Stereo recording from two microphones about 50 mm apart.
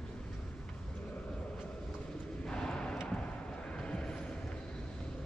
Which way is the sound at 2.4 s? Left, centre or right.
Centre.